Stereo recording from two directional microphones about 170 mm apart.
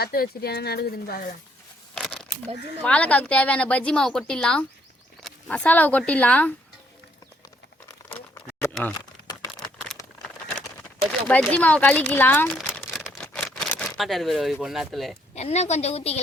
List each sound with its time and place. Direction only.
0.0 s speech: 65° left (ahead or behind)
2.0 s crumpling: 5° left (ahead or behind)
2.8 s speech: 10° left (ahead or behind)
11.3 s speech: 10° left (ahead or behind)
12.5 s a sound: centre (ahead or behind)
15.4 s a woman's voice: 40° left (ahead or behind)